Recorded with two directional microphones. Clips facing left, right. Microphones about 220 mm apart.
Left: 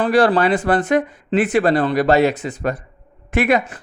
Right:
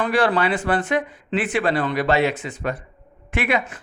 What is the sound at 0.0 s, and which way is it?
Speech, 35° left (ahead or behind).